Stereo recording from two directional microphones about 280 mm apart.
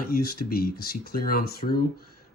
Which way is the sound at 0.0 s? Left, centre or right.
Left.